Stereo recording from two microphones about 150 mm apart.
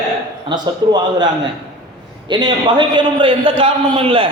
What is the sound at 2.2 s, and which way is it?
A man's voice, 30° right (ahead or behind).